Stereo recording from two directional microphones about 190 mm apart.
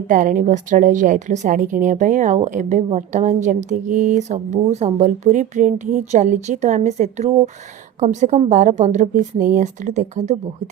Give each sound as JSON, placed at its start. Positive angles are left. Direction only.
{"t": 0.1, "sound": "a woman's voice", "side_deg": -45}